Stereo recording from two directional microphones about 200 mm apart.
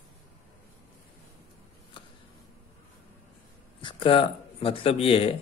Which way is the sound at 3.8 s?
25° left (ahead or behind).